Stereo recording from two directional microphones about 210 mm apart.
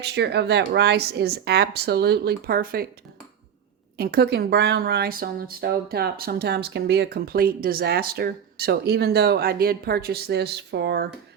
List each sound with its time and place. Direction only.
0.0 s speech: 50° right (ahead or behind)
3.9 s speech: 45° right (ahead or behind)